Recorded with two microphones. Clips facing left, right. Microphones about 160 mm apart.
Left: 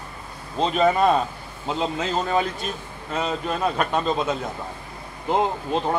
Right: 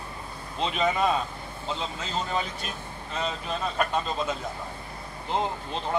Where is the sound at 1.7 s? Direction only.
70° left (ahead or behind).